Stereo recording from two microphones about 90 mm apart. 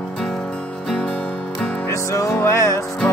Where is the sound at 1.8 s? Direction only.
30° left (ahead or behind).